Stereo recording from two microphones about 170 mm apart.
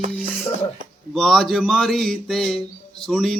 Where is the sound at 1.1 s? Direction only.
5° left (ahead or behind).